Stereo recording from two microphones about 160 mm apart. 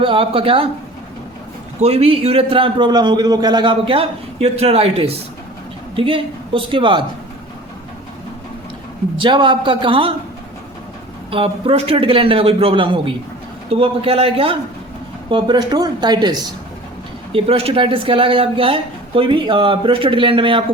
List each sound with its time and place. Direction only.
0.0 s a man's voice: 35° right (ahead or behind)
1.8 s a man's voice: 40° right (ahead or behind)
9.1 s a man's voice: 30° right (ahead or behind)
11.3 s a man's voice: 35° right (ahead or behind)